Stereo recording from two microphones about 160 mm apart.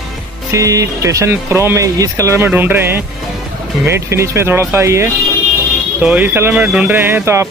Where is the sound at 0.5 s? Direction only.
20° right (ahead or behind).